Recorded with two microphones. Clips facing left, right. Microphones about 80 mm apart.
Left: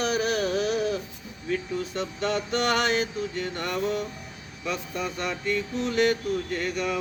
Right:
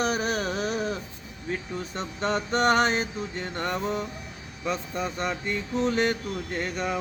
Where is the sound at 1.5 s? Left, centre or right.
Right.